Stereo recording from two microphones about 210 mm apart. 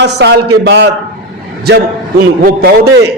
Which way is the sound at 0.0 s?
55° right (ahead or behind).